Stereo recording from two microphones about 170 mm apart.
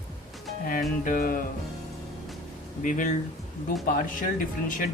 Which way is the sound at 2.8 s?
50° left (ahead or behind).